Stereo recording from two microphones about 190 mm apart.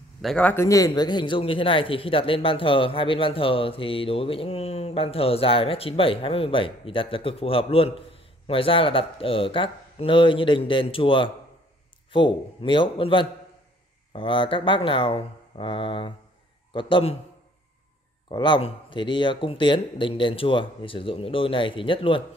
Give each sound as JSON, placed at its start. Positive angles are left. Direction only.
{"t": 0.2, "sound": "a man's voice", "side_deg": 5}
{"t": 18.3, "sound": "a man's voice", "side_deg": 25}